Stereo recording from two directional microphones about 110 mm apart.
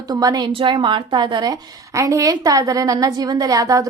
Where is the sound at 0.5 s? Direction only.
50° right (ahead or behind); by 3.8 s 30° right (ahead or behind).